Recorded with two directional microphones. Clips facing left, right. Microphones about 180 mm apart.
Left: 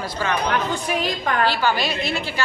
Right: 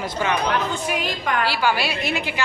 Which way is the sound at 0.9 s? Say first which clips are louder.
Left 2 dB; 35° left (ahead or behind).